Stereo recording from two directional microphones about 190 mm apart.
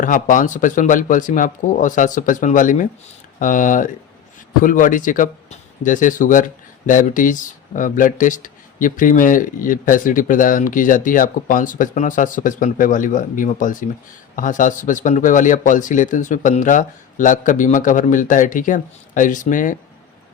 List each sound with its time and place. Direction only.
0.0 s speech: 45° left (ahead or behind)